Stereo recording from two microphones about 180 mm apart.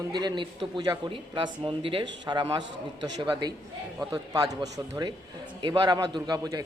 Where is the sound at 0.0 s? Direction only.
25° right (ahead or behind).